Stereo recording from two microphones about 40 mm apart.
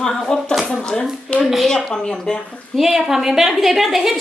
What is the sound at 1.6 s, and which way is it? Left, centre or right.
Speech, centre.